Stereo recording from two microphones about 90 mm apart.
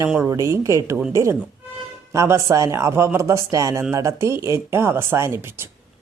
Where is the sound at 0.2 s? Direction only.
35° right (ahead or behind).